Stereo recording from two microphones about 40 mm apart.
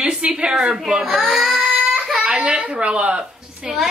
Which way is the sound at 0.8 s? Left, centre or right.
Centre.